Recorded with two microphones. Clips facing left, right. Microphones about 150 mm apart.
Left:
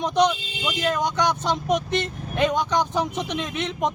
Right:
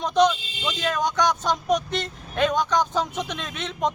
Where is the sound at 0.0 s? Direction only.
20° left (ahead or behind).